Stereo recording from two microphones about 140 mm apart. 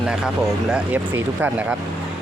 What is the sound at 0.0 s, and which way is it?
Speech, 5° right (ahead or behind).